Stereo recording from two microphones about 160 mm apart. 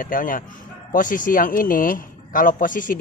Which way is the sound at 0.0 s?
60° left (ahead or behind).